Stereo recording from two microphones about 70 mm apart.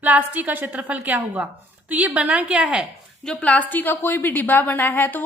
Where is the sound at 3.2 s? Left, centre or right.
Centre.